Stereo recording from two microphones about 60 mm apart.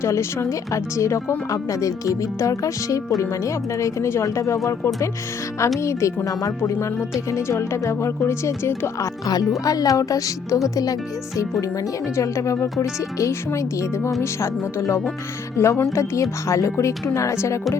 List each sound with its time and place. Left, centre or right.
0.0 s speech: left
5.8 s speech: left
7.3 s speech: left
9.2 s speech: left
12.1 s speech: left